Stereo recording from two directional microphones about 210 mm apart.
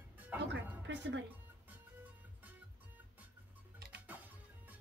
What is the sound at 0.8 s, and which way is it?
Speech, 60° right (ahead or behind).